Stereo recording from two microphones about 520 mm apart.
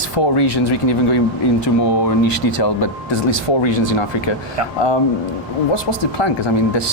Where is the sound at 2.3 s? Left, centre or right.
Left.